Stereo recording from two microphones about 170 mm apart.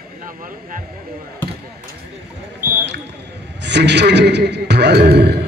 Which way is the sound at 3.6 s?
90° right.